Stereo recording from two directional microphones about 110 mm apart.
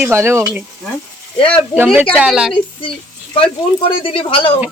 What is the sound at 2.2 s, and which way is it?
Speech, 5° right (ahead or behind).